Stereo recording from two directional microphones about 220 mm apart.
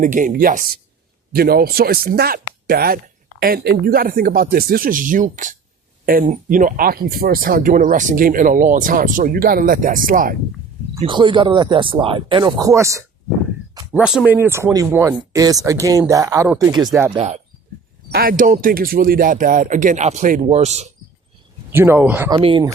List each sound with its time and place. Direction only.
0.0 s speech: 35° right (ahead or behind)
10.9 s speech: 20° right (ahead or behind)
17.2 s speech: 30° right (ahead or behind)
18.1 s speech: 40° right (ahead or behind)
21.7 s speech: 10° right (ahead or behind)
22.3 s speech: 25° right (ahead or behind)